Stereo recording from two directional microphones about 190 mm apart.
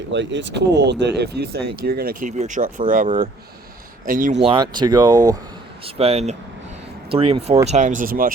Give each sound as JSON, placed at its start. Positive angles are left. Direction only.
{"t": 0.1, "sound": "speech", "side_deg": -70}
{"t": 2.3, "sound": "speech", "side_deg": -40}
{"t": 4.4, "sound": "speech", "side_deg": -25}
{"t": 5.8, "sound": "speech", "side_deg": -30}